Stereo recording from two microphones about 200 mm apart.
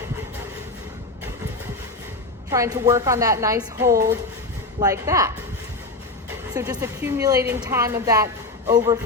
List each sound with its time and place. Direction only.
2.5 s a woman's voice: 15° right (ahead or behind)
6.5 s a woman's voice: 15° right (ahead or behind)